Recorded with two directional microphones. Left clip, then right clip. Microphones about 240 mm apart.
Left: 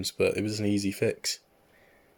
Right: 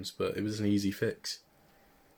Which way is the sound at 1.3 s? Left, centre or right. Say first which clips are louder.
Left 6 dB; left.